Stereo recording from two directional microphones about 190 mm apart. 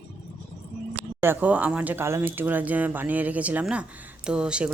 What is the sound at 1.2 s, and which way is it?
Speech, 10° right (ahead or behind).